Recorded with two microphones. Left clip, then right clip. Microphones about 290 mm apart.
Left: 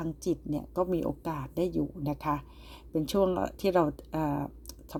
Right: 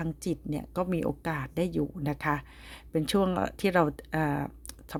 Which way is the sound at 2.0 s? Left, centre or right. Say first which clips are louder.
Right 1 dB; right.